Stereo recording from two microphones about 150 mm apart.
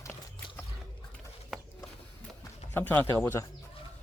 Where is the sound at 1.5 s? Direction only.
Centre (ahead or behind).